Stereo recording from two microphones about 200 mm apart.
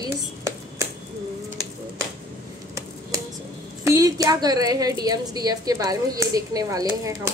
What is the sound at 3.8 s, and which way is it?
A woman's voice, 15° right (ahead or behind).